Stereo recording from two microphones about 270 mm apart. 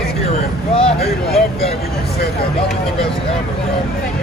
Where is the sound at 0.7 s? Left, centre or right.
Left.